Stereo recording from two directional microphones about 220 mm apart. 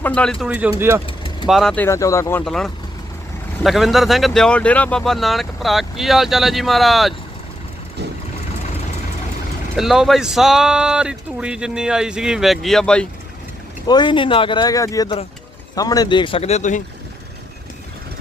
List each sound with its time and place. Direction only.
0.0 s speech: 5° left (ahead or behind); by 1.0 s 10° right (ahead or behind)
1.0 s vehicle: 25° left (ahead or behind)
1.5 s speech: centre (ahead or behind)
9.7 s speech: centre (ahead or behind)
13.8 s speech: 20° left (ahead or behind)